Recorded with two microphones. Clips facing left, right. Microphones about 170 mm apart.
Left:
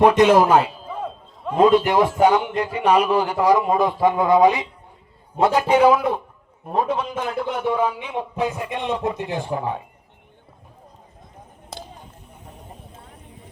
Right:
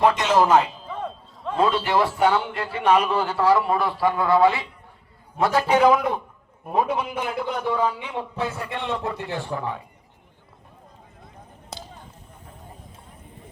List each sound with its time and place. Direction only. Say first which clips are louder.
0.0 s a man's voice: left 5 dB; 15° left (ahead or behind)
6.7 s a man's voice: left 1 dB; 10° right (ahead or behind)
7.5 s a man's voice: left 2 dB; 10° left (ahead or behind)